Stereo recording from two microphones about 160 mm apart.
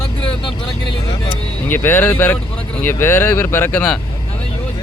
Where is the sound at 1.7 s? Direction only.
15° left (ahead or behind).